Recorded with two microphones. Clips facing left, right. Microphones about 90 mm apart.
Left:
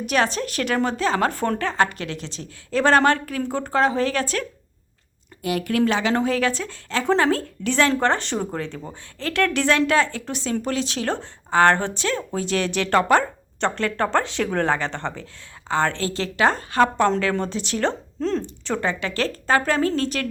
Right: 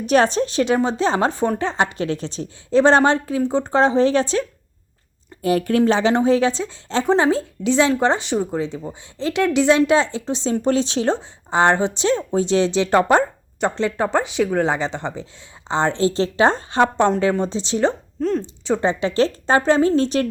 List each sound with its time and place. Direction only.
0.0 s a woman's voice: 35° right (ahead or behind)
5.4 s a woman's voice: 35° right (ahead or behind); by 8.6 s 10° right (ahead or behind)
9.1 s a woman's voice: 20° right (ahead or behind)
18.4 s a woman's voice: 20° right (ahead or behind)